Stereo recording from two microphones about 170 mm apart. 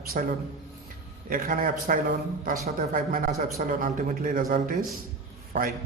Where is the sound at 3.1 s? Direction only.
50° right (ahead or behind).